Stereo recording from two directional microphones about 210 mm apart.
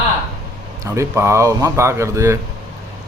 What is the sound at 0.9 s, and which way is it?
A man's voice, 15° right (ahead or behind).